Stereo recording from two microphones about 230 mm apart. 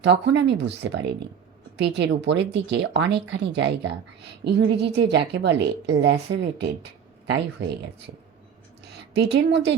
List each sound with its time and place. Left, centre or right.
0.0 s a woman's voice: right
9.1 s a woman's voice: right